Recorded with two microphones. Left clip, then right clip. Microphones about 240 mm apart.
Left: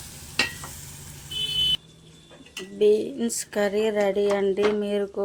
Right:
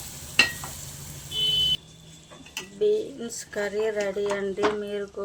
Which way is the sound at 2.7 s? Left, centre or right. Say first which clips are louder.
Left 4 dB; left.